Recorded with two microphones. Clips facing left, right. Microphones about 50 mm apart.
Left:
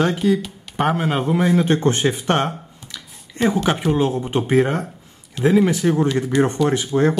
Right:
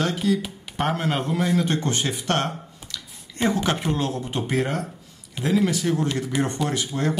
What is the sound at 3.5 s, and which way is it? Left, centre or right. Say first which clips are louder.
Speech: left 5 dB; centre.